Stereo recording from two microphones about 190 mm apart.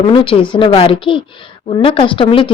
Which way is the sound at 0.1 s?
25° left (ahead or behind).